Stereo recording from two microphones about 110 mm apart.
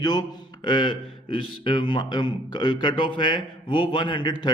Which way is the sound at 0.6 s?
45° left (ahead or behind).